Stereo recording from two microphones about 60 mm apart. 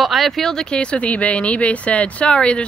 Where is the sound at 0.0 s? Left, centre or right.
Centre.